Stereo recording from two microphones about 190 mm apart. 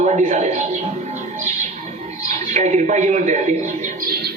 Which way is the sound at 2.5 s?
40° right (ahead or behind).